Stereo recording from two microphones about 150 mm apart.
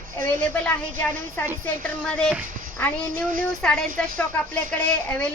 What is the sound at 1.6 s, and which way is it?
Speech, 5° left (ahead or behind).